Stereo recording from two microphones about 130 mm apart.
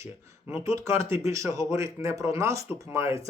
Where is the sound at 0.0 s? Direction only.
20° right (ahead or behind).